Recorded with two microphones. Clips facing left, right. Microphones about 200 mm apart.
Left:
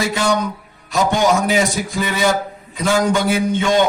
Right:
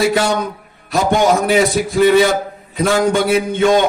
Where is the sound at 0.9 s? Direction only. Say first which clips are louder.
Right 2 dB; 55° right (ahead or behind).